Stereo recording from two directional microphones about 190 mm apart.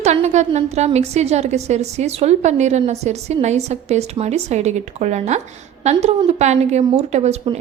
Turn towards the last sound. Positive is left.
turn(degrees=-35)  # may be behind; listen again after turning